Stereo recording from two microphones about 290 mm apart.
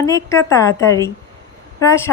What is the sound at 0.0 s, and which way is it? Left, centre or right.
Speech, centre.